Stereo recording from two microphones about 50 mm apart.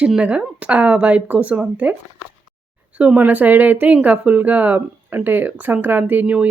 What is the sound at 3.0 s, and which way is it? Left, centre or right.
Speech, right.